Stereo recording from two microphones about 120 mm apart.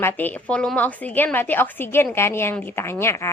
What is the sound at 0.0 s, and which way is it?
A woman's voice, 15° left (ahead or behind).